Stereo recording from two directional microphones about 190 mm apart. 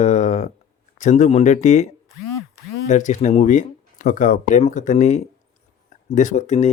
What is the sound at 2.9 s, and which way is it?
Speech, 40° left (ahead or behind).